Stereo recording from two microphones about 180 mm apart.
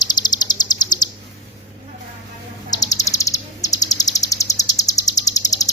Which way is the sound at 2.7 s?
20° left (ahead or behind).